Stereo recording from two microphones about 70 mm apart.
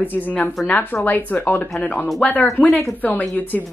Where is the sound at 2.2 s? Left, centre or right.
Left.